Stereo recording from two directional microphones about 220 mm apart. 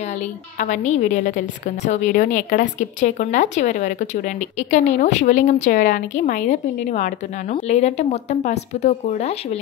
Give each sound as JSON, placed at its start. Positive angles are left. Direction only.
{"t": 0.6, "sound": "speech", "side_deg": 35}